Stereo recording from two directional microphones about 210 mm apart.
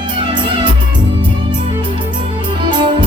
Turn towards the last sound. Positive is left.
turn(degrees=-25)  # may be behind; listen again after turning